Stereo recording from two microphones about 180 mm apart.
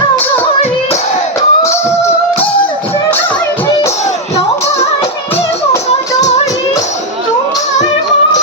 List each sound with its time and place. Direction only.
1.4 s music: 15° left (ahead or behind)
6.1 s music: 40° left (ahead or behind)